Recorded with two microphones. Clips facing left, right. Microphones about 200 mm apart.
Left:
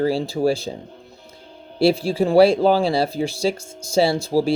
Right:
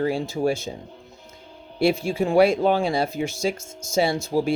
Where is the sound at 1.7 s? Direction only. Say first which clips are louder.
Left 4 dB; 30° left (ahead or behind).